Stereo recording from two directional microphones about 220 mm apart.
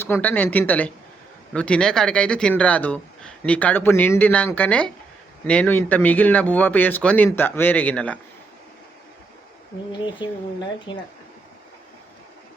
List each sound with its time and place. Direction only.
0.0 s a man's voice: 10° left (ahead or behind)
10.2 s speech: 20° left (ahead or behind)